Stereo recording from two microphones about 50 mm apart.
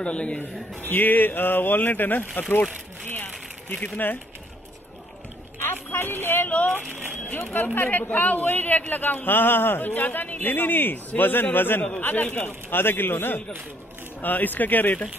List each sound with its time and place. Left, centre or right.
0.0 s a man's voice: left
0.7 s speech: left
3.1 s a sound: left
3.7 s speech: left
5.6 s a sound: left
6.2 s speech: left
6.9 s speech: right
7.5 s speech: left